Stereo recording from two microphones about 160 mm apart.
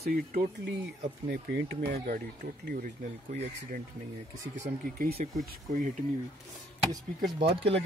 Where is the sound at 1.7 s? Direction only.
65° right (ahead or behind).